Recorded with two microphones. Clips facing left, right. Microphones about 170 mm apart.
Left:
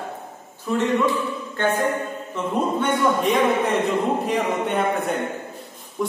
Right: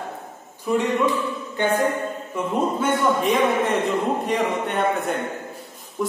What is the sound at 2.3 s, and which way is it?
A man's voice, centre (ahead or behind).